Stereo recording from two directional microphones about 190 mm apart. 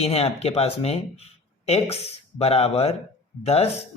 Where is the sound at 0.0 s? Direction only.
30° left (ahead or behind).